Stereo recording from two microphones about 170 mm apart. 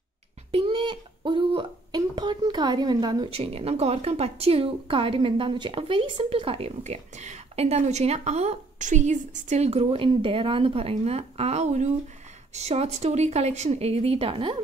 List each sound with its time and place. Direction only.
0.5 s speech: 30° right (ahead or behind)